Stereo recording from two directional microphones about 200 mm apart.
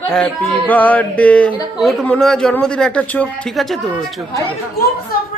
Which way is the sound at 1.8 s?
Centre (ahead or behind).